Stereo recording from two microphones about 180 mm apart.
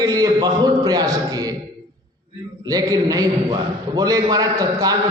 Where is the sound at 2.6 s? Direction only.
20° right (ahead or behind).